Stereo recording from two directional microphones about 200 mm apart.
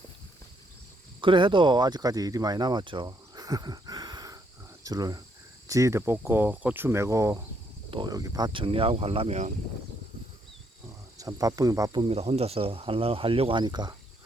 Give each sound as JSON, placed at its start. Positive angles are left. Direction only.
{"t": 1.2, "sound": "speech", "side_deg": -25}
{"t": 4.8, "sound": "cricket", "side_deg": -20}
{"t": 7.9, "sound": "speech", "side_deg": -20}
{"t": 11.2, "sound": "speech", "side_deg": -15}